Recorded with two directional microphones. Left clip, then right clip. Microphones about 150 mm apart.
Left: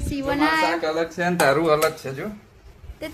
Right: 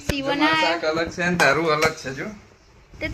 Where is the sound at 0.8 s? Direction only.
35° left (ahead or behind).